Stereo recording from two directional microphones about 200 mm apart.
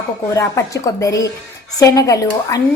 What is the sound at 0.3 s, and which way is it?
A woman's voice, 15° left (ahead or behind).